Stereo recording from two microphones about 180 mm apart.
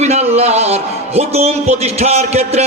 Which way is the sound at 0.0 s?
35° right (ahead or behind).